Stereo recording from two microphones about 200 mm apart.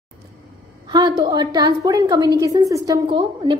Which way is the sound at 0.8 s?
20° right (ahead or behind).